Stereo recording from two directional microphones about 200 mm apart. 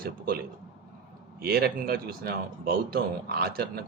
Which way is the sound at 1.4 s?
50° right (ahead or behind).